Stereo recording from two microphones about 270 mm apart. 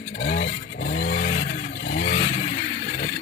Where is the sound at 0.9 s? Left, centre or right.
Left.